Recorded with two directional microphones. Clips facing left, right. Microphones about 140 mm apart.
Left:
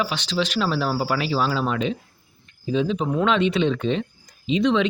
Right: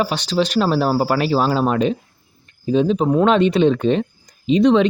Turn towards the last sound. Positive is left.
turn(degrees=-40)  # may be behind; listen again after turning